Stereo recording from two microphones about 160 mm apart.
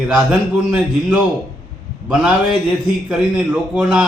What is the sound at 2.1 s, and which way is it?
A man's voice, 5° right (ahead or behind).